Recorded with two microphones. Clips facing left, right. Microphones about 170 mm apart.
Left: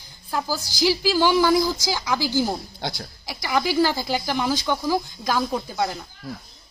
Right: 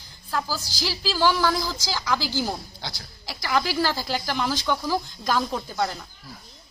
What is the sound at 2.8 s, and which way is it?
Speech, 50° left (ahead or behind).